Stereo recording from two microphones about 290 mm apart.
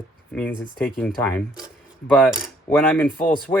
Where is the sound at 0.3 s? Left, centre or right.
Centre.